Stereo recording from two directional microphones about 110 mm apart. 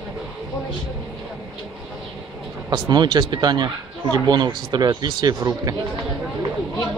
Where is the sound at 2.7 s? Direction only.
40° right (ahead or behind).